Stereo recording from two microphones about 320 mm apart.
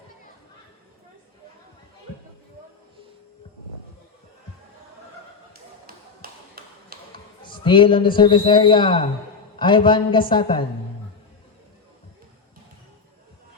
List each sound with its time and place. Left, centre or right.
6.6 s tap: right
7.1 s a man's voice: centre